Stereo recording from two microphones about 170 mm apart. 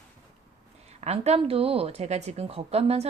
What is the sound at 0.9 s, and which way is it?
Speech, 40° right (ahead or behind).